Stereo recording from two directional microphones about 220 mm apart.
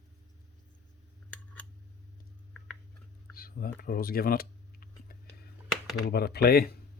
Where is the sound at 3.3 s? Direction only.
40° left (ahead or behind).